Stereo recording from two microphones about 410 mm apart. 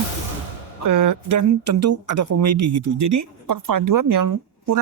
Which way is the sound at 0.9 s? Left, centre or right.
Right.